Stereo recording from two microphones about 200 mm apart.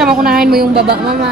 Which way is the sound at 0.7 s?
50° right (ahead or behind).